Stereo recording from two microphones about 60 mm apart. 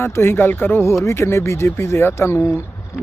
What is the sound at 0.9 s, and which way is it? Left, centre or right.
Speech, left.